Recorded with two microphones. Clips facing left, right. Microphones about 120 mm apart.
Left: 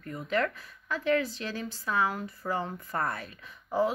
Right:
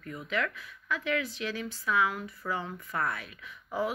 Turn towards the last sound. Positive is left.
turn(degrees=35)  # may be behind; listen again after turning